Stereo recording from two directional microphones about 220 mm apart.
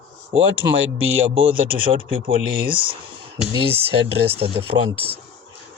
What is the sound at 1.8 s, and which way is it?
Speech, 25° right (ahead or behind).